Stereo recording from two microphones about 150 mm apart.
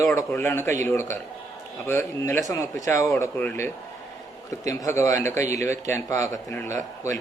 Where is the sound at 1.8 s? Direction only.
15° left (ahead or behind).